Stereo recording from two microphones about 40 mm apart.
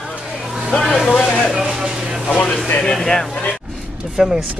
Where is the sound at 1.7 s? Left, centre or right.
Centre.